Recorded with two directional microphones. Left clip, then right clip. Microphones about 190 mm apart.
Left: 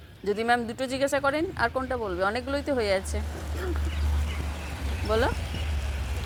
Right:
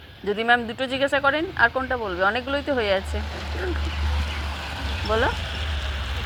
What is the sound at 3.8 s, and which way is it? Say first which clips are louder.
Vehicle: right 7 dB; 70° left (ahead or behind).